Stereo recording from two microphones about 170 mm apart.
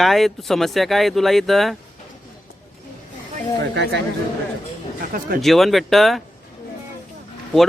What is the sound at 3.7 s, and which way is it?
Speech, 90° right.